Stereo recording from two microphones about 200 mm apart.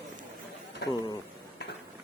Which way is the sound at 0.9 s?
20° left (ahead or behind).